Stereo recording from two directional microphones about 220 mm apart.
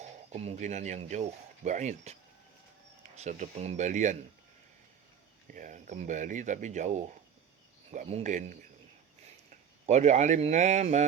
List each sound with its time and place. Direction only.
0.0 s speech: 30° right (ahead or behind)
3.2 s speech: 35° right (ahead or behind)
5.5 s speech: 35° right (ahead or behind)
9.8 s speech: 30° right (ahead or behind)